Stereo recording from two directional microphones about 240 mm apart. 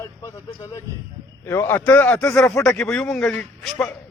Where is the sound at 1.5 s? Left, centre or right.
Centre.